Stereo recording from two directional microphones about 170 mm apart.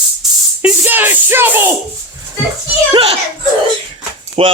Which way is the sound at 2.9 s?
35° right (ahead or behind).